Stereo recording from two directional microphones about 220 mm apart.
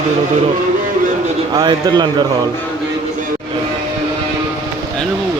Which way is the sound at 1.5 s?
20° right (ahead or behind).